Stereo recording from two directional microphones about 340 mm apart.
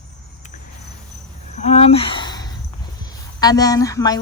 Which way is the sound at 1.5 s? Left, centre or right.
Centre.